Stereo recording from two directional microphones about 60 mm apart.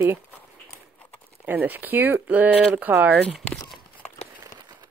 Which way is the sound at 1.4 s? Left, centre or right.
Right.